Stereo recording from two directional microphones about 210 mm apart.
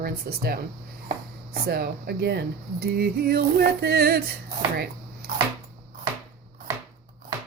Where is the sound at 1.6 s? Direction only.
45° right (ahead or behind).